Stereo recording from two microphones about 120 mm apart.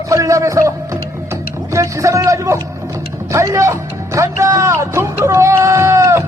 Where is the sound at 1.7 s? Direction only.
25° right (ahead or behind).